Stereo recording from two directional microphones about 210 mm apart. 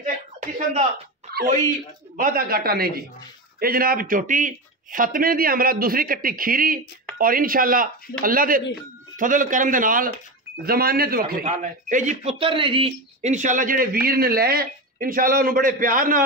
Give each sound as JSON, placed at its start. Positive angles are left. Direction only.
{"t": 1.3, "sound": "speech", "side_deg": -50}